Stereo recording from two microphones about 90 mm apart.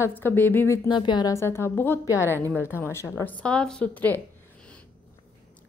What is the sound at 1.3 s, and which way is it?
Speech, 30° left (ahead or behind).